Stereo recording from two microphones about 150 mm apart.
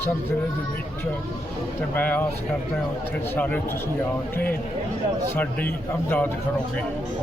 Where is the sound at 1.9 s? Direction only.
10° left (ahead or behind).